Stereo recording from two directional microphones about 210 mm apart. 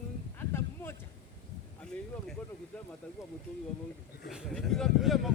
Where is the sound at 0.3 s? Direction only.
10° left (ahead or behind).